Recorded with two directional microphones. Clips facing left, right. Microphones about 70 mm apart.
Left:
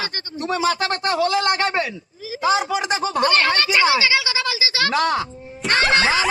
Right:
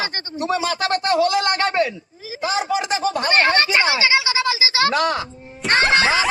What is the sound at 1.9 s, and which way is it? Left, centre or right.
Speech, right.